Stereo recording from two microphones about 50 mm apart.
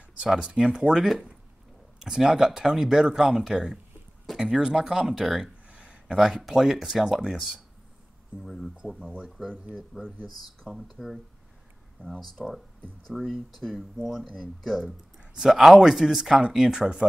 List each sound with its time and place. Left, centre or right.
0.3 s speech: centre
5.7 s a sound: right
6.1 s speech: centre
8.4 s speech: centre
10.7 s speech: centre
13.1 s speech: centre